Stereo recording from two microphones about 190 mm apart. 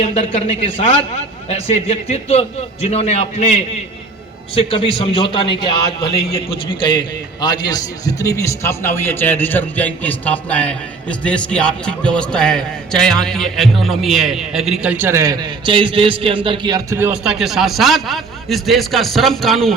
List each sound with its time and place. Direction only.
0.0 s a man's voice: 35° left (ahead or behind); by 19.7 s centre (ahead or behind)